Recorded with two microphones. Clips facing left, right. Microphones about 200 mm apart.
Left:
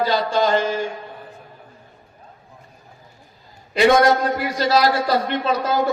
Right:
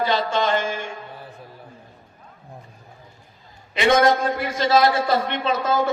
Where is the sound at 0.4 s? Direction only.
40° left (ahead or behind).